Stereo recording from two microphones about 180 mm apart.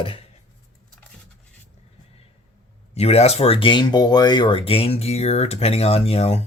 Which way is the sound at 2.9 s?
35° left (ahead or behind).